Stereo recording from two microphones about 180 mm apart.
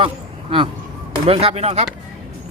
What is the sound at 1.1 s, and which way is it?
Speech, 35° right (ahead or behind).